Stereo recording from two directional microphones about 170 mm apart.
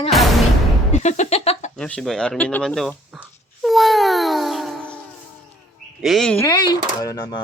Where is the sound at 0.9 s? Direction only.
45° left (ahead or behind).